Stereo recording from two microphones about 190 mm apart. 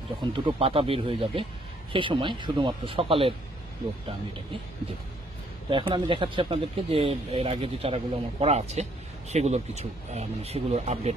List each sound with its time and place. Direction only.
0.2 s speech: 30° right (ahead or behind)
5.7 s speech: 25° right (ahead or behind)